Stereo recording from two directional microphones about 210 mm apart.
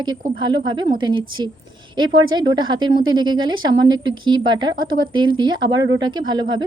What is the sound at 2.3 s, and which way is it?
A woman's voice, 20° right (ahead or behind).